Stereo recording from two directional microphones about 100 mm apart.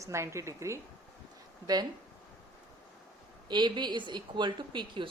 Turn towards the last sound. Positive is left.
turn(degrees=-50)  # may be behind; listen again after turning